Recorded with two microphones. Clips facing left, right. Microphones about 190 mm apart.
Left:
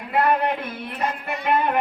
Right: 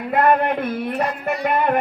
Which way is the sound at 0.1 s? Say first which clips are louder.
Right 3 dB; 50° right (ahead or behind).